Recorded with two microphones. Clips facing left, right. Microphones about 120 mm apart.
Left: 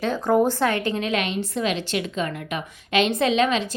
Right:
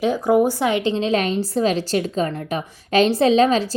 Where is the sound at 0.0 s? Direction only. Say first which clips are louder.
Right 3 dB; 10° right (ahead or behind).